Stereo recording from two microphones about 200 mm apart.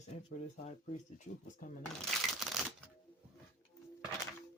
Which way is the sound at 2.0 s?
Centre (ahead or behind).